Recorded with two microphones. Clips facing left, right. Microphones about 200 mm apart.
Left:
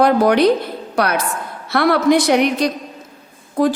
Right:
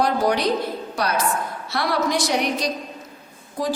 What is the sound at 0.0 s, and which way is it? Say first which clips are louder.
A woman's voice: left 8 dB; 60° left (ahead or behind).